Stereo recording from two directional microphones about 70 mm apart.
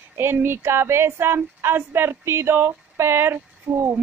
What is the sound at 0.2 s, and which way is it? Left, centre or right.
Speech, right.